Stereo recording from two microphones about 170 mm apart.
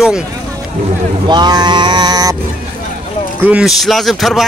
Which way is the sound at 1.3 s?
25° right (ahead or behind).